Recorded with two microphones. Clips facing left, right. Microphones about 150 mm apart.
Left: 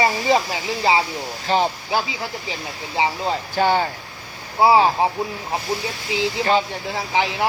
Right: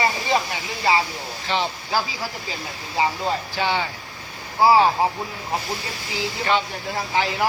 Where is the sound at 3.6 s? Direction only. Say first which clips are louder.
Left 8 dB; 45° left (ahead or behind).